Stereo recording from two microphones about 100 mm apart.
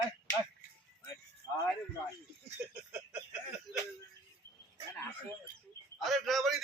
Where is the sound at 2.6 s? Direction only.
15° right (ahead or behind).